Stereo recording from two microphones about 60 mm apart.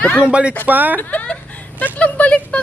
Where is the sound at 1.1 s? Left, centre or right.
Left.